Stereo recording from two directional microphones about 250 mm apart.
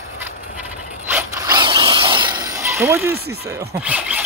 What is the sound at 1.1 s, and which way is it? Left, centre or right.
Mechanisms, centre.